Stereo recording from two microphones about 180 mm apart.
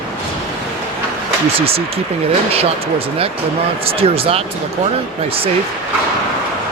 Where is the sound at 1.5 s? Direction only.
30° right (ahead or behind).